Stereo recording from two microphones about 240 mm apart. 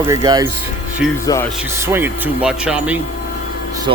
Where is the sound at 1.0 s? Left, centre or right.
Centre.